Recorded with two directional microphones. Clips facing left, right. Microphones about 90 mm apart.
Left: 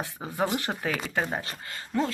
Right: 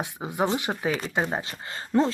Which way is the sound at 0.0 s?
15° right (ahead or behind).